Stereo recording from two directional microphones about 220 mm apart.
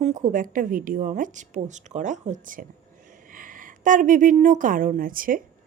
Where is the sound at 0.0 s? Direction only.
35° right (ahead or behind).